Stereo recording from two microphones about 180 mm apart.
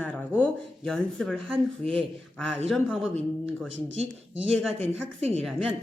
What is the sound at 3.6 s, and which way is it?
Speech, 90° right.